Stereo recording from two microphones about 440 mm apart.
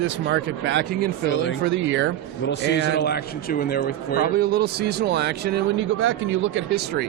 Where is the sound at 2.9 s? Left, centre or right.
Left.